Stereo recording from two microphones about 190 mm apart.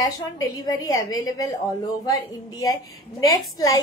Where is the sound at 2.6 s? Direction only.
20° left (ahead or behind).